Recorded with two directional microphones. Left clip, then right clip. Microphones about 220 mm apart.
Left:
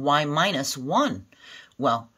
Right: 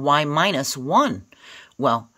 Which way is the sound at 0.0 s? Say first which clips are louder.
Right 3 dB; 35° right (ahead or behind).